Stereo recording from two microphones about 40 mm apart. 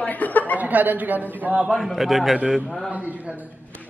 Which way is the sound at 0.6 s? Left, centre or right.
Right.